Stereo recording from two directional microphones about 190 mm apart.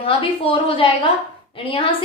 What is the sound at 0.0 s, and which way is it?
A woman's voice, 30° left (ahead or behind).